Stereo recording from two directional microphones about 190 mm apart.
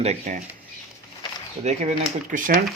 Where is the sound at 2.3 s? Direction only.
45° right (ahead or behind).